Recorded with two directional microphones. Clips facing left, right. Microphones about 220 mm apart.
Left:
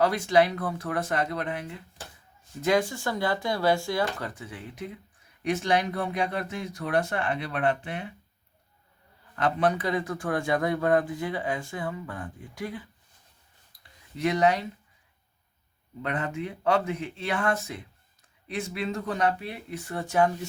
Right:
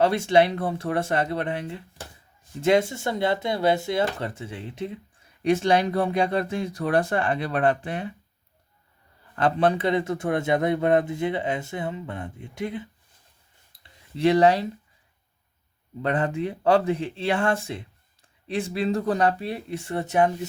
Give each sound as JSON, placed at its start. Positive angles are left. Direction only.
{"t": 0.0, "sound": "a man's voice", "side_deg": -25}
{"t": 9.3, "sound": "a man's voice", "side_deg": -30}
{"t": 13.7, "sound": "a sound", "side_deg": -30}
{"t": 16.0, "sound": "speech", "side_deg": -30}